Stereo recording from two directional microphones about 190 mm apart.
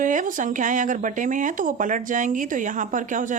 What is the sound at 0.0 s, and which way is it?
A woman's voice, 45° right (ahead or behind).